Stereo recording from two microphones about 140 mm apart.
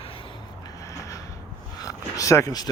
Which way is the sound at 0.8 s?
25° left (ahead or behind).